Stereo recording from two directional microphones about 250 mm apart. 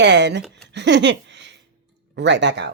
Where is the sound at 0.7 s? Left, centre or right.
Right.